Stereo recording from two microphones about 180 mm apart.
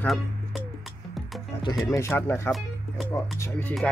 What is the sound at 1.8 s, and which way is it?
Speech, 15° left (ahead or behind).